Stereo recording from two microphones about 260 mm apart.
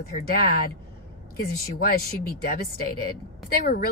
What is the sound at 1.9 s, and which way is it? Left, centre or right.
Speech, left.